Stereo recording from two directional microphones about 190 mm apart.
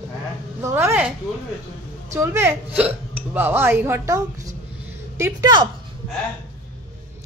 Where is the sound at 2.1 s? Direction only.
15° right (ahead or behind).